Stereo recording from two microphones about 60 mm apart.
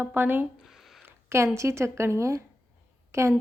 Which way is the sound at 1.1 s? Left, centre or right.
Right.